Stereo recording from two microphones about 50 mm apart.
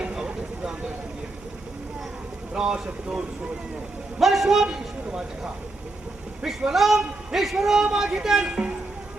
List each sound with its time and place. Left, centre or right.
0.0 s vehicle: centre
2.5 s a man's voice: centre
4.2 s a man's voice: centre
6.7 s a man's voice: centre
8.4 s speech: right